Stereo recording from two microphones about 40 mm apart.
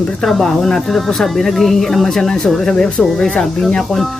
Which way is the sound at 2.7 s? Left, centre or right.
Centre.